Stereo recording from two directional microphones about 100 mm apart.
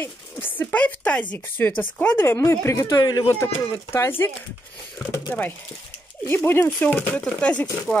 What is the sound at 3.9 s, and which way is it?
Speech, 20° left (ahead or behind).